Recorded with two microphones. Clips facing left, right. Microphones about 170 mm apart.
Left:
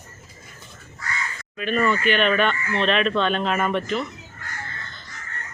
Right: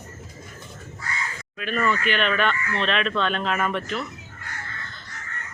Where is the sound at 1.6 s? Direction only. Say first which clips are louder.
Left 3 dB; centre (ahead or behind).